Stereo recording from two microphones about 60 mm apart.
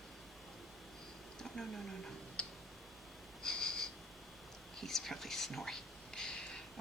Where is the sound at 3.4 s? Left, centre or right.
Centre.